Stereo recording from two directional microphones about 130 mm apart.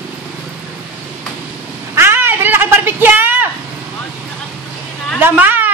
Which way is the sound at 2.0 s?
20° right (ahead or behind).